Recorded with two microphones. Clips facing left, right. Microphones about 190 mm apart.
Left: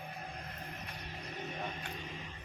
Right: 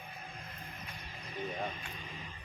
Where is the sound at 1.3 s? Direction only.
50° left (ahead or behind).